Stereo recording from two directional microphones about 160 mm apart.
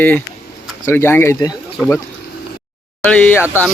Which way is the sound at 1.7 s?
10° left (ahead or behind).